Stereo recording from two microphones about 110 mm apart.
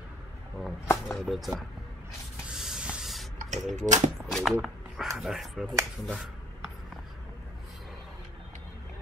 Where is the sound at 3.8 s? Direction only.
90° right.